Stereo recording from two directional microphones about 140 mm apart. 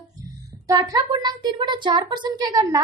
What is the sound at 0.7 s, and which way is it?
A child's voice, 25° right (ahead or behind).